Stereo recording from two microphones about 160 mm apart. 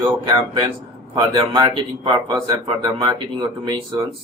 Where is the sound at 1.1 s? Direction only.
25° right (ahead or behind).